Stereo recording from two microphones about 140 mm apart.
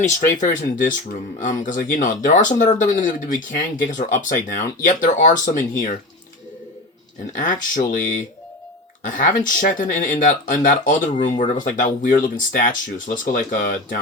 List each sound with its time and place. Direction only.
0.0 s speech: 65° left (ahead or behind)
7.3 s speech: 70° left (ahead or behind)